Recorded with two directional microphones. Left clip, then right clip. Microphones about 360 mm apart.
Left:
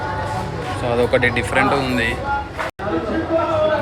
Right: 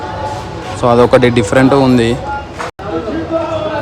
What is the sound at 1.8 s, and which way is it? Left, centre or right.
Speech, centre.